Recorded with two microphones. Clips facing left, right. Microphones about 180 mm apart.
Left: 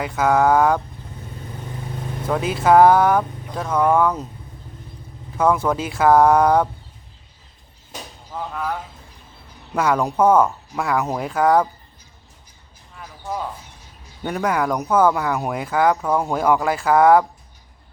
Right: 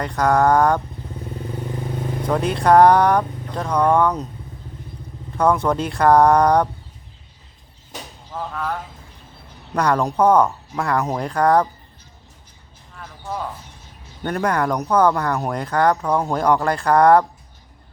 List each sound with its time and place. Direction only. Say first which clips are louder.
0.0 s speech: even; 5° left (ahead or behind)
2.2 s speech: even; 5° left (ahead or behind)
5.4 s speech: right 1 dB; centre (ahead or behind)
8.3 s speech: even; 5° left (ahead or behind)
13.0 s a sound: left 1 dB; 10° left (ahead or behind)
14.3 s speech: right 1 dB; 5° left (ahead or behind)